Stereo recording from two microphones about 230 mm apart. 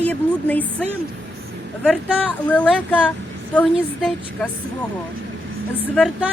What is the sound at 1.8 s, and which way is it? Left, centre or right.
Speech, centre.